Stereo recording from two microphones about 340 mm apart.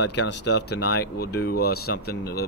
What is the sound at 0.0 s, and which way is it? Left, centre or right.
Speech, left.